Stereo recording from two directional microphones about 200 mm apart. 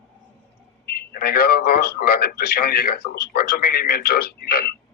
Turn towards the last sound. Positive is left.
turn(degrees=50)  # may be behind; listen again after turning